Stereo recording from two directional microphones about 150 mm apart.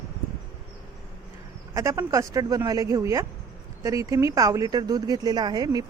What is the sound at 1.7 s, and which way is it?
Speech, 20° right (ahead or behind).